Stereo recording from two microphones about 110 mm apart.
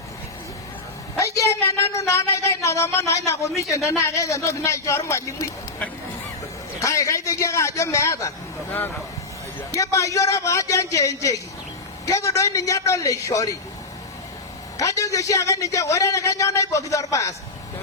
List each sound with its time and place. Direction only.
1.2 s a woman's voice: 30° left (ahead or behind)
6.7 s a woman's voice: 30° left (ahead or behind)
8.7 s speech: 15° left (ahead or behind)
9.7 s a man's voice: 30° left (ahead or behind)
14.8 s a man's voice: 30° left (ahead or behind)